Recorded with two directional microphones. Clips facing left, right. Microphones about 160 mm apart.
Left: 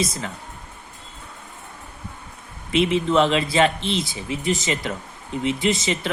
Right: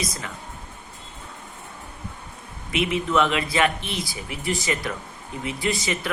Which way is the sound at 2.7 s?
30° left (ahead or behind).